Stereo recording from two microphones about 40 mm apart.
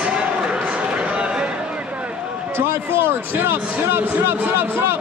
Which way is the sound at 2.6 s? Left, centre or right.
Right.